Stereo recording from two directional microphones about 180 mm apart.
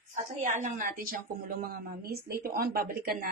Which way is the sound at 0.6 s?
45° right (ahead or behind).